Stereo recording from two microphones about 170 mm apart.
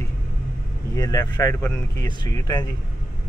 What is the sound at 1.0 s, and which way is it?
Speech, 20° left (ahead or behind).